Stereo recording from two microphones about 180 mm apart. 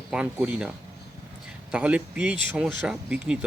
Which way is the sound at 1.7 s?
5° right (ahead or behind).